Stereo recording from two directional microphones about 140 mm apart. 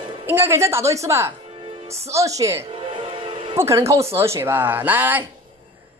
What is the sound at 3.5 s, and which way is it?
Speech, 20° right (ahead or behind).